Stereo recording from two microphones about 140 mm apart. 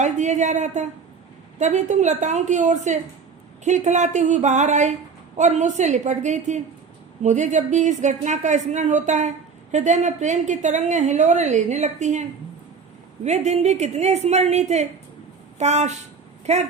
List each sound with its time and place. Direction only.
0.0 s a woman's voice: 55° right (ahead or behind)
13.2 s a woman's voice: 55° right (ahead or behind)